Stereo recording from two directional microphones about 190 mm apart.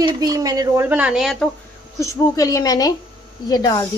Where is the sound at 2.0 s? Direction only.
15° left (ahead or behind).